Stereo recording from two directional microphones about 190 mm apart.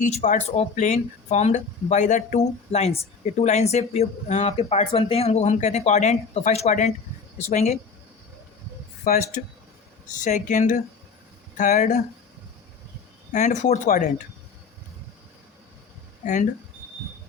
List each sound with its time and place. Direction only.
0.0 s speech: 40° left (ahead or behind)
9.1 s speech: 50° left (ahead or behind)
13.3 s speech: 40° left (ahead or behind)
16.2 s speech: 40° left (ahead or behind)